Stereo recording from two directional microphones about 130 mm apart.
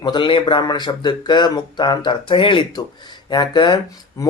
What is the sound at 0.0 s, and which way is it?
Speech, 40° left (ahead or behind).